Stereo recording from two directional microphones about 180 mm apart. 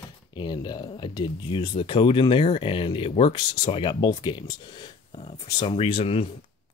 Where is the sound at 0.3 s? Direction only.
25° left (ahead or behind).